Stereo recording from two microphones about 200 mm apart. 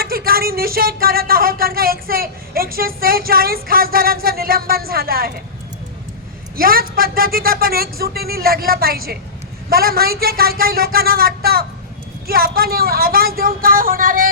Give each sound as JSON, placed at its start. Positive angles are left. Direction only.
{"t": 0.0, "sound": "speech", "side_deg": -50}
{"t": 6.6, "sound": "speech", "side_deg": -45}